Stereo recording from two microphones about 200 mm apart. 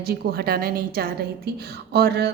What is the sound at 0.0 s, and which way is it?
A woman's voice, 50° right (ahead or behind).